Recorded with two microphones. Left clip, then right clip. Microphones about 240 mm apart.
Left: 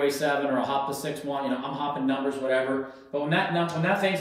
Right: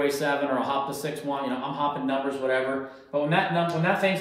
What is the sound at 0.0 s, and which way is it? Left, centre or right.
Speech, right.